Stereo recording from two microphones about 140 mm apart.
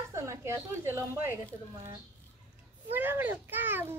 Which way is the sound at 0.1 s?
20° right (ahead or behind).